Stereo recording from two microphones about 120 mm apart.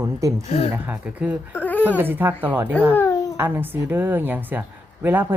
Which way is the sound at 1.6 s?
15° left (ahead or behind).